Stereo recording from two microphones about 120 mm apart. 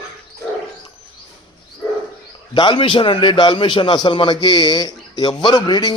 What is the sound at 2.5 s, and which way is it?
A man's voice, 40° left (ahead or behind).